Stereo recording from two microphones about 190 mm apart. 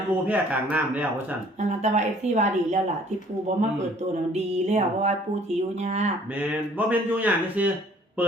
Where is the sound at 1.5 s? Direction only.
35° right (ahead or behind).